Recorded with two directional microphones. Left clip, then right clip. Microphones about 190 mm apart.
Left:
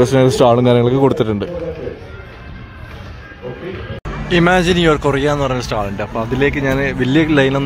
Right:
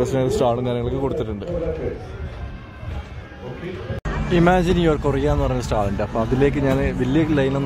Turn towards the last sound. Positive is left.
turn(degrees=10)  # may be behind; listen again after turning